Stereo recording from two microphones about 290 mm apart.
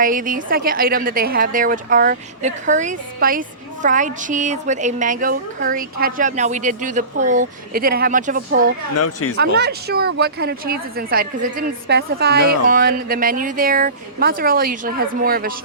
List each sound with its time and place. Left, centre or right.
0.0 s a woman's voice: right
9.0 s speech: left
9.4 s speech: right